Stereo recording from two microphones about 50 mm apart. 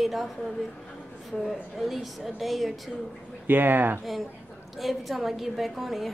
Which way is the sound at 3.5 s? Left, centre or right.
Right.